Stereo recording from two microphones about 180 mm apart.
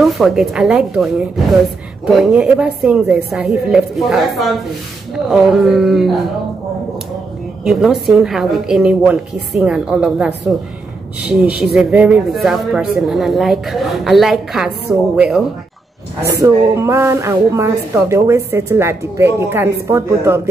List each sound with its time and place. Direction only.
0.0 s speech: centre (ahead or behind)
7.6 s speech: centre (ahead or behind)
16.3 s a woman's voice: 15° right (ahead or behind)